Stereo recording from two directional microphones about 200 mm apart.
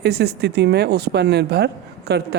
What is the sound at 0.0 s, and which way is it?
Speech, 55° right (ahead or behind).